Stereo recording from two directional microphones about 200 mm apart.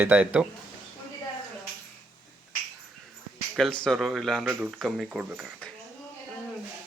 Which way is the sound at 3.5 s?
Centre (ahead or behind).